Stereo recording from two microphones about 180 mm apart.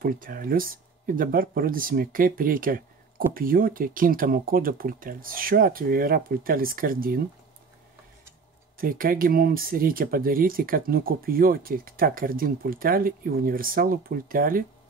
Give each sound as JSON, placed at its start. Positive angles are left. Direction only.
{"t": 0.0, "sound": "speech", "side_deg": -50}
{"t": 8.7, "sound": "speech", "side_deg": -50}